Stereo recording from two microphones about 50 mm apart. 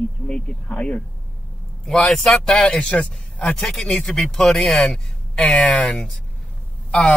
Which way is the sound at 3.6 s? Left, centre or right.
Centre.